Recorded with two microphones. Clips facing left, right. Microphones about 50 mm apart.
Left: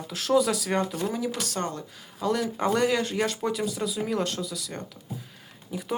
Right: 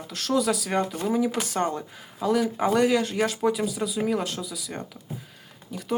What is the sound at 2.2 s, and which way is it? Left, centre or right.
Speech, centre.